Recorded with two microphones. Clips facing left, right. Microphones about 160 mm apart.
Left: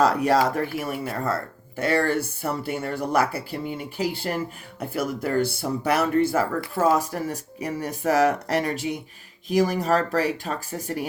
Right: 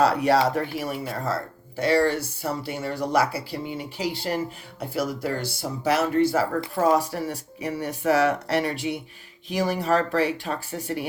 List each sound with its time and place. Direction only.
0.0 s speech: 45° left (ahead or behind)
6.7 s speech: 45° left (ahead or behind)